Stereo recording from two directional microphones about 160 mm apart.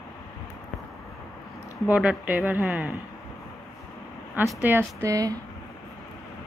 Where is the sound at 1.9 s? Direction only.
10° right (ahead or behind).